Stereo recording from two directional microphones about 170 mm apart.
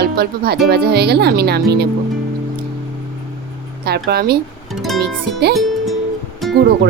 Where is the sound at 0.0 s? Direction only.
70° right (ahead or behind).